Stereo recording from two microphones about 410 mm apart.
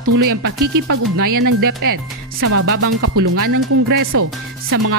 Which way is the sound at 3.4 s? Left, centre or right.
Right.